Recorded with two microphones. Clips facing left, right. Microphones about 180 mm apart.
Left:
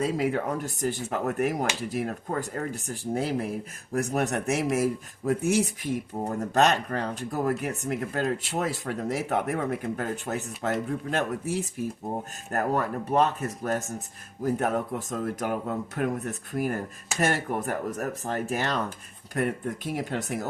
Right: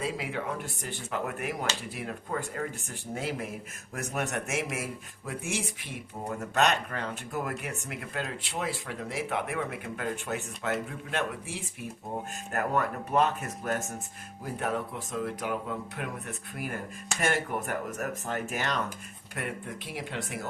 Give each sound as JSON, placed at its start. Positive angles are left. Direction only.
{"t": 0.0, "sound": "speech", "side_deg": 45}